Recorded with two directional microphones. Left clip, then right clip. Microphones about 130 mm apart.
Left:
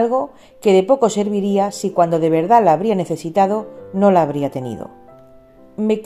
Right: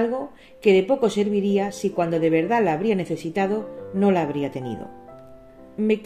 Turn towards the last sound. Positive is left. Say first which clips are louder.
# left 3 dB
turn(degrees=65)  # may be behind; listen again after turning